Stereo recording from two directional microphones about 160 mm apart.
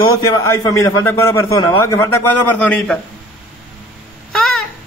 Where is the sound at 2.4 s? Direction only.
10° left (ahead or behind).